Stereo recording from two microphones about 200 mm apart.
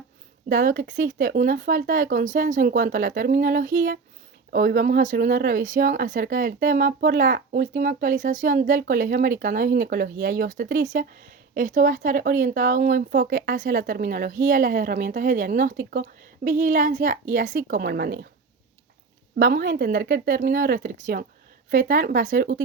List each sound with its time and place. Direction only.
0.4 s speech: 45° right (ahead or behind)
19.4 s speech: 45° right (ahead or behind)